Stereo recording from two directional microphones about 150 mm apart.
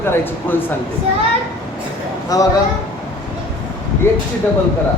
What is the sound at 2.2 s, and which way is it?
Speech, 25° left (ahead or behind).